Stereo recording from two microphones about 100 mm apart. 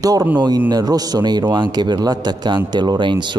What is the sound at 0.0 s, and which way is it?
A man's voice, 35° right (ahead or behind).